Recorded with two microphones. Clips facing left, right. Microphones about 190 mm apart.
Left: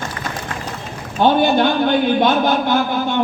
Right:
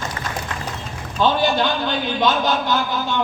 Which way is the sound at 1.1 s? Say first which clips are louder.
Left 4 dB; 55° left (ahead or behind).